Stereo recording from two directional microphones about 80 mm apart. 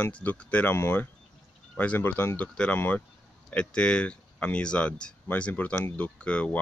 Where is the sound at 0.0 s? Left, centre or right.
Centre.